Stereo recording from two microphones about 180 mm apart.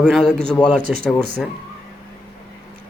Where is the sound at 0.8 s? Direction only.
55° right (ahead or behind).